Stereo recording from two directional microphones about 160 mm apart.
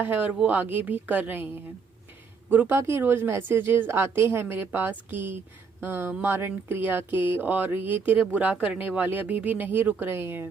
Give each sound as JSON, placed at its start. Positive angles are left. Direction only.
{"t": 0.0, "sound": "a woman's voice", "side_deg": -10}
{"t": 2.5, "sound": "a woman's voice", "side_deg": -10}